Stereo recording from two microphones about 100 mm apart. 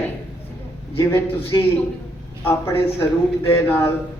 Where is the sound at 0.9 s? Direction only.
30° left (ahead or behind).